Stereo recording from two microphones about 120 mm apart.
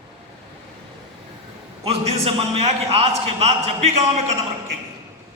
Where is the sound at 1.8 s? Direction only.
60° right (ahead or behind).